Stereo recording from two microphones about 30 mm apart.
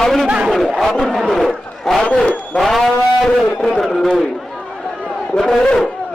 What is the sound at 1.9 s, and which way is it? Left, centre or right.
A man's voice, centre.